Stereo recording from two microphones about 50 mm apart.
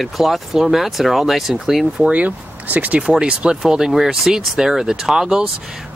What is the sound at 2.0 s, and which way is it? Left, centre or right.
Speech, right.